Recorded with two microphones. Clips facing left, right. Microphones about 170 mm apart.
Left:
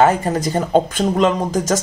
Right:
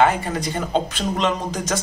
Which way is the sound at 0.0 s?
40° left (ahead or behind).